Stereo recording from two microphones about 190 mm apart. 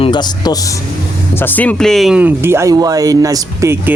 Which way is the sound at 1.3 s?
10° left (ahead or behind).